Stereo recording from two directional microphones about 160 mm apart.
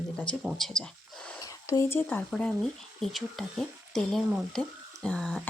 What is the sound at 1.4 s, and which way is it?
Speech, 20° left (ahead or behind).